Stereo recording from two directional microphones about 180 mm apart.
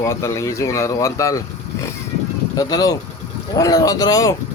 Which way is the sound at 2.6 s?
20° left (ahead or behind).